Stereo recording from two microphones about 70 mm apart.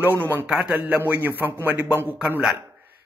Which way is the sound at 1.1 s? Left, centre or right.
Right.